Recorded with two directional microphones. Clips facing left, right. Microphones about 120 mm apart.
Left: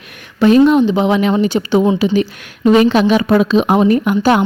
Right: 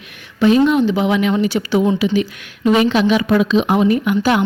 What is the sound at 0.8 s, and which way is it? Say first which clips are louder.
A woman's voice: left 3 dB; 25° left (ahead or behind).